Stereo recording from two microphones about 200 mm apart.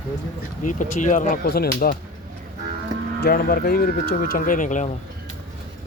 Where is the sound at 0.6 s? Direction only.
40° left (ahead or behind).